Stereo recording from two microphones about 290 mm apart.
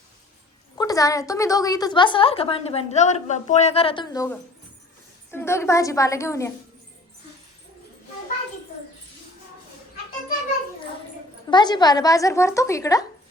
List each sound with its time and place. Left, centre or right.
0.8 s a woman's voice: centre
11.5 s a woman's voice: centre